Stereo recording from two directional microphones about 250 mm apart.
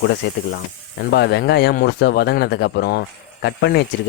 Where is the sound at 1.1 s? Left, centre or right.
Left.